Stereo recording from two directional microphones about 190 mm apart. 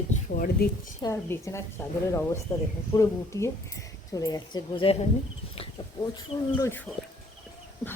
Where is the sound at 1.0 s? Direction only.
15° left (ahead or behind).